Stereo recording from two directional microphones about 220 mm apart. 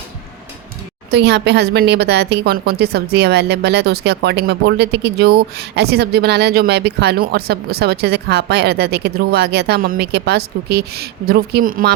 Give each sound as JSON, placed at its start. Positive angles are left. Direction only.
{"t": 1.1, "sound": "a woman's voice", "side_deg": -50}